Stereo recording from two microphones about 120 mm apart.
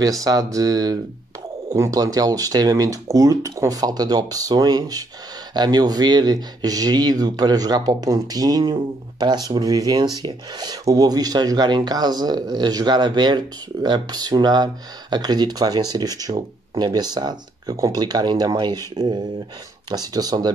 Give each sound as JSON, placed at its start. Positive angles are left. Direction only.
{"t": 0.2, "sound": "speech", "side_deg": -30}